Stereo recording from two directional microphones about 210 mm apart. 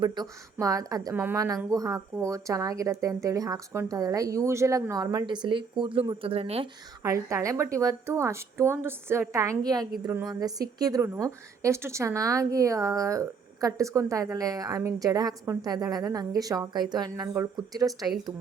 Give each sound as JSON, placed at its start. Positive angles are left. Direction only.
{"t": 0.2, "sound": "speech", "side_deg": -20}
{"t": 7.0, "sound": "speech", "side_deg": -15}